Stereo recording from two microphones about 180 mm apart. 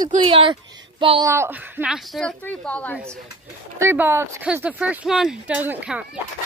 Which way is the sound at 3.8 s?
10° right (ahead or behind).